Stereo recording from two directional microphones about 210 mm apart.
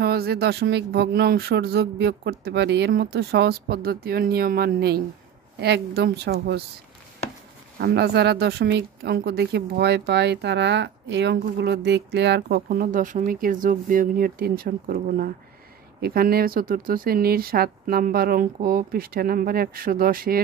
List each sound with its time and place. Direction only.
0.0 s speech: 50° right (ahead or behind)
7.8 s speech: 50° right (ahead or behind)